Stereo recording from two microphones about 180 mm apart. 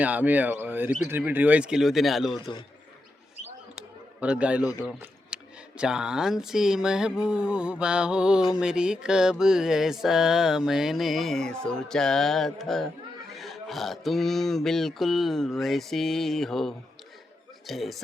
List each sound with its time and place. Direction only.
0.0 s speech: 10° right (ahead or behind)
1.0 s mantra: 10° right (ahead or behind)
2.4 s a man's voice: 25° left (ahead or behind)
3.8 s a sound: 5° right (ahead or behind)
4.9 s mantra: 5° right (ahead or behind)
17.7 s speech: centre (ahead or behind)